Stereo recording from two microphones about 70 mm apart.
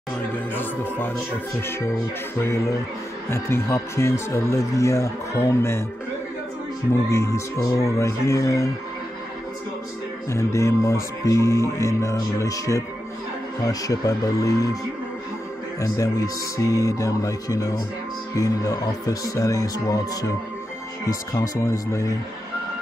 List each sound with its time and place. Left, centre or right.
0.6 s speech: left
2.3 s speech: left
6.9 s music: left
10.3 s music: left
13.7 s speech: left
15.8 s music: left
18.3 s speech: left
21.0 s music: left